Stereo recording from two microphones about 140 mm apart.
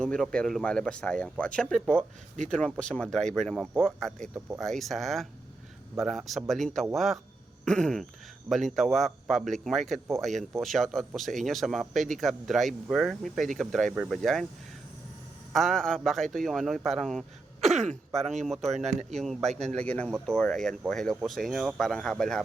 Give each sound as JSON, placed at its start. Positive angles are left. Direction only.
{"t": 0.0, "sound": "speech", "side_deg": 5}
{"t": 4.4, "sound": "speech", "side_deg": -15}
{"t": 4.6, "sound": "speech", "side_deg": 0}
{"t": 7.6, "sound": "a sound", "side_deg": 5}
{"t": 8.4, "sound": "speech", "side_deg": 0}
{"t": 15.5, "sound": "speech", "side_deg": 5}
{"t": 17.7, "sound": "speech", "side_deg": -50}
{"t": 18.3, "sound": "speech", "side_deg": 0}